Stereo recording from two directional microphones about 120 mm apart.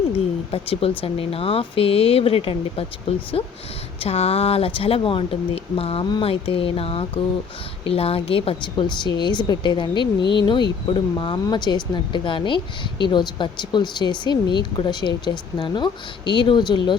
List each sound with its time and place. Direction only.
0.5 s speech: 55° left (ahead or behind)